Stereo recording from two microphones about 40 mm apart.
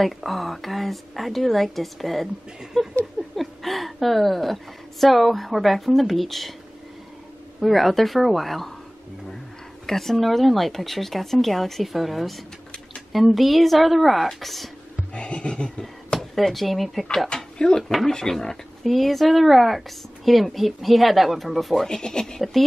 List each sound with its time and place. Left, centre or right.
0.0 s speech: centre
2.8 s a sound: centre
5.0 s speech: centre
7.6 s speech: centre
9.8 s speech: centre
15.1 s a sound: left
16.2 s speech: centre
17.6 s a sound: centre
18.3 s speech: centre
21.8 s speech: centre